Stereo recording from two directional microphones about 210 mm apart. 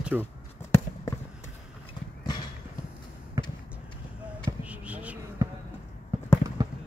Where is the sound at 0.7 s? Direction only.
15° left (ahead or behind).